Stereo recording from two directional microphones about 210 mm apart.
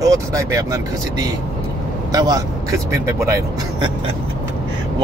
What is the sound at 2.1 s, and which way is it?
A man's voice, 15° right (ahead or behind).